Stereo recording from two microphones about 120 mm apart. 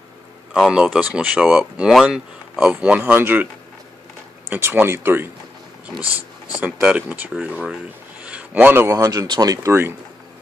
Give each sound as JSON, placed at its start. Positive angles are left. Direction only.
{"t": 0.5, "sound": "speech", "side_deg": -5}
{"t": 4.5, "sound": "speech", "side_deg": -20}
{"t": 6.5, "sound": "speech", "side_deg": -10}